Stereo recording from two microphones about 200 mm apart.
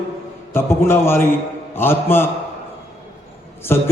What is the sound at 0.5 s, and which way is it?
Speech, 10° left (ahead or behind).